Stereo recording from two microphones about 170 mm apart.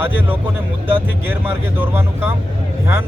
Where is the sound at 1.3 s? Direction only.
10° right (ahead or behind).